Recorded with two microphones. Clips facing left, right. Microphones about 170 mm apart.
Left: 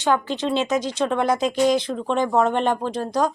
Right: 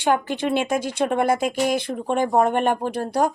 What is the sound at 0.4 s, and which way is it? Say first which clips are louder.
Speech: even; 50° right (ahead or behind).